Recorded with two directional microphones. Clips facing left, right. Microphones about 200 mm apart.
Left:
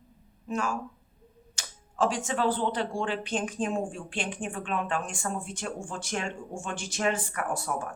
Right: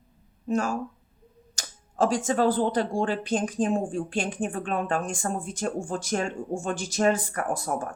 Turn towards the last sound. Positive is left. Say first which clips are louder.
# right 3 dB
turn(degrees=-40)  # may be behind; listen again after turning